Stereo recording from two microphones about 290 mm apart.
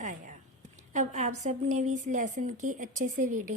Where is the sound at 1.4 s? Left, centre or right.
Right.